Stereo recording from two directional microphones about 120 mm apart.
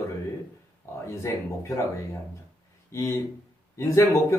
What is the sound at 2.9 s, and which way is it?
Speech, 25° left (ahead or behind).